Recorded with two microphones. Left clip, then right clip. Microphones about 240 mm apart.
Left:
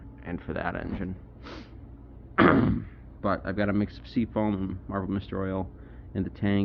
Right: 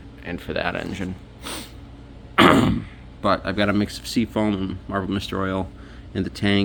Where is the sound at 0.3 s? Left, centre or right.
Centre.